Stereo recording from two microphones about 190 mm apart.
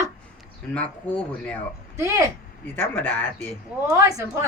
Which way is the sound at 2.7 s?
10° left (ahead or behind).